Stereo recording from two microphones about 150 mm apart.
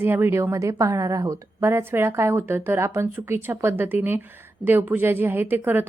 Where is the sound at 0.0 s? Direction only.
15° right (ahead or behind).